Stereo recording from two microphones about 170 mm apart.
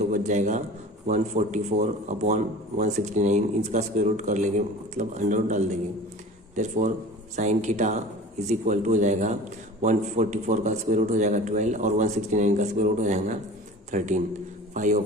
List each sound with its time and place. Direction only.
0.0 s a man's voice: 45° right (ahead or behind)